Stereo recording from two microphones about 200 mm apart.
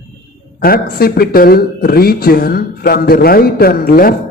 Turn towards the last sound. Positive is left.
turn(degrees=50)  # may be behind; listen again after turning